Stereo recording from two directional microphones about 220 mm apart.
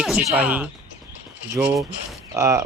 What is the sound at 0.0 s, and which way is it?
Speech, centre (ahead or behind).